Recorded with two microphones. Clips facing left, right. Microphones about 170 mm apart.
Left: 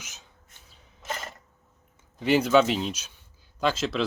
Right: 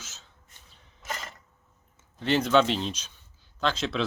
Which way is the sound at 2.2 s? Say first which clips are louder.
Left 2 dB; 10° left (ahead or behind).